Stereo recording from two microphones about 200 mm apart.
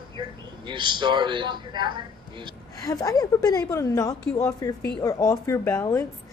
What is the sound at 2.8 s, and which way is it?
A woman's voice, 15° left (ahead or behind).